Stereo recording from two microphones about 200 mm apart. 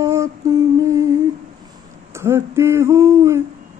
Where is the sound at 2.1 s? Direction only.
15° right (ahead or behind).